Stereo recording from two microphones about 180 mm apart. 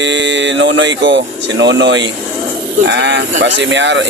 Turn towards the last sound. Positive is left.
turn(degrees=-85)